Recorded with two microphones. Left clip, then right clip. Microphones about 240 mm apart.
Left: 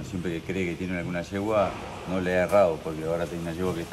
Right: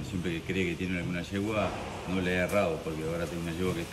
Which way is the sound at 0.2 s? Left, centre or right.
Centre.